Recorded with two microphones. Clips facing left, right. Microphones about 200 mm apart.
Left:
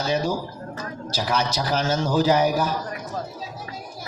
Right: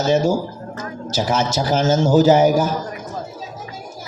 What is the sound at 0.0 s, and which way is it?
Speech, 45° right (ahead or behind).